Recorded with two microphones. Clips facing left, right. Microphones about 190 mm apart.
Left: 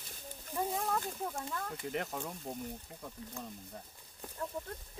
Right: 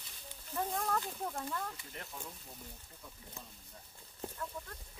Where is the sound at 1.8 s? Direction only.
75° left (ahead or behind).